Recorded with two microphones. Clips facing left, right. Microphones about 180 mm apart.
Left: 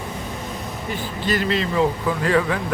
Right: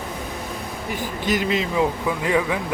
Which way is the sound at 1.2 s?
15° right (ahead or behind).